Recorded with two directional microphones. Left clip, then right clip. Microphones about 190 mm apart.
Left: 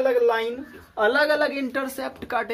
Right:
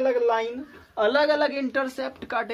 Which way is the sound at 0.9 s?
35° right (ahead or behind).